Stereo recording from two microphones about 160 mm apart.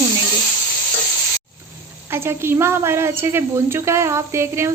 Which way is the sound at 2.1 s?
15° right (ahead or behind).